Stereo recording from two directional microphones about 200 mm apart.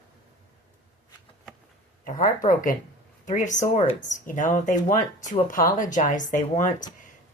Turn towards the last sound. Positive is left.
turn(degrees=40)  # may be behind; listen again after turning